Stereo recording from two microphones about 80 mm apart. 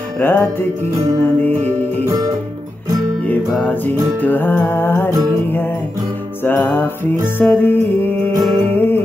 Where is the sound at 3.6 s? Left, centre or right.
Left.